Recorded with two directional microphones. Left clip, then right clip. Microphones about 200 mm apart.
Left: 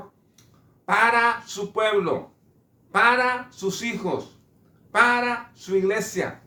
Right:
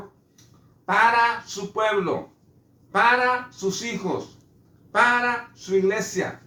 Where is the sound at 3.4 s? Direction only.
20° left (ahead or behind).